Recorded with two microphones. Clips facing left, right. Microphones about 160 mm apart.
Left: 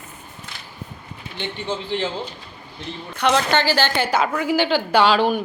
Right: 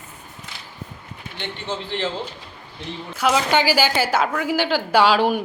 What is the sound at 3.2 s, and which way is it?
A woman's voice, 5° right (ahead or behind).